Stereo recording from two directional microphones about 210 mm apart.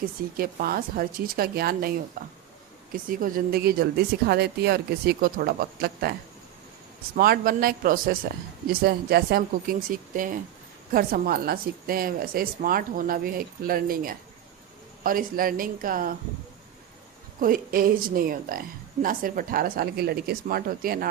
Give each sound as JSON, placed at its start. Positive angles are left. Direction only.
{"t": 0.0, "sound": "speech", "side_deg": -45}
{"t": 7.2, "sound": "speech", "side_deg": -45}
{"t": 17.4, "sound": "speech", "side_deg": -40}